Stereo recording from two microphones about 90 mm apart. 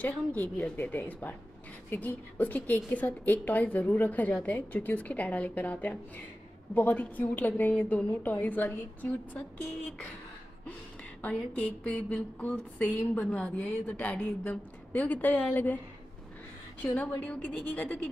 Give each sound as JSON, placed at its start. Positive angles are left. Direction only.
{"t": 0.0, "sound": "a woman's voice", "side_deg": 15}
{"t": 11.2, "sound": "a woman's voice", "side_deg": 15}
{"t": 16.8, "sound": "a woman's voice", "side_deg": 15}